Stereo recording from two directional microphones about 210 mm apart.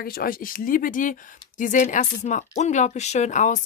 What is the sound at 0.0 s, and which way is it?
Speech, 45° left (ahead or behind).